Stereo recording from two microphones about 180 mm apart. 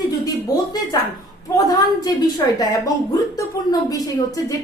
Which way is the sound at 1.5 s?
20° left (ahead or behind).